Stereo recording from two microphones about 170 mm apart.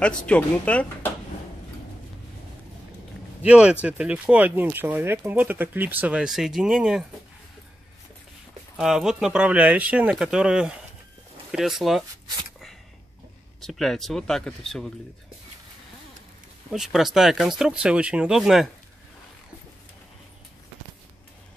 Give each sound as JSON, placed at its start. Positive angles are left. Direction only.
{"t": 0.3, "sound": "speech", "side_deg": 5}
{"t": 3.4, "sound": "speech", "side_deg": -5}
{"t": 8.7, "sound": "speech", "side_deg": -5}
{"t": 13.6, "sound": "speech", "side_deg": 0}
{"t": 16.7, "sound": "speech", "side_deg": 0}